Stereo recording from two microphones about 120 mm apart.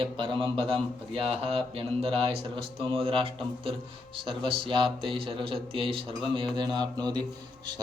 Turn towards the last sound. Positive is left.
turn(degrees=-35)  # may be behind; listen again after turning